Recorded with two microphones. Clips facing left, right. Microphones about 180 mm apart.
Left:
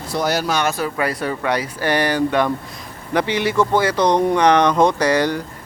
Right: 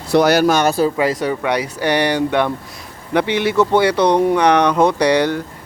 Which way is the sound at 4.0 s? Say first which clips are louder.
Right 2 dB; 10° right (ahead or behind).